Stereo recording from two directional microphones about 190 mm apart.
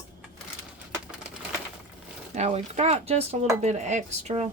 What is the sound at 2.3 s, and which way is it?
A woman's voice, 35° right (ahead or behind).